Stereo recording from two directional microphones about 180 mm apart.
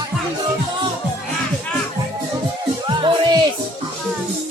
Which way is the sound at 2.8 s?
25° right (ahead or behind).